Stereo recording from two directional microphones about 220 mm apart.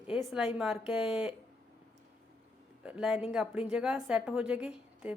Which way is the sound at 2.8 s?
5° right (ahead or behind).